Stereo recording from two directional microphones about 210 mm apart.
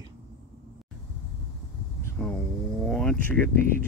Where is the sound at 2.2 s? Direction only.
5° left (ahead or behind).